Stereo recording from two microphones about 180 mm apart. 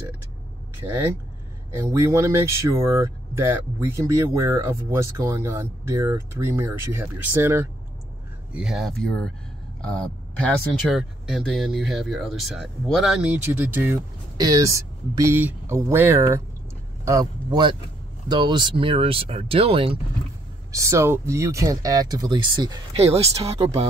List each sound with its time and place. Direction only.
0.7 s speech: 15° right (ahead or behind)
8.5 s speech: centre (ahead or behind)
10.4 s a man's voice: centre (ahead or behind); by 20.0 s 30° right (ahead or behind)
20.7 s speech: 15° right (ahead or behind); by 23.7 s 35° right (ahead or behind)